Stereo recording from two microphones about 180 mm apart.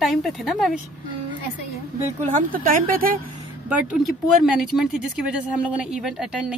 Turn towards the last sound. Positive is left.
turn(degrees=-5)  # may be behind; listen again after turning